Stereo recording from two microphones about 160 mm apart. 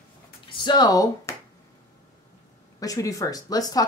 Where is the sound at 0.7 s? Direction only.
25° left (ahead or behind).